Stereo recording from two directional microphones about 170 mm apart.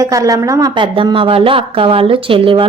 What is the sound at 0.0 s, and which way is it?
Speech, 20° right (ahead or behind).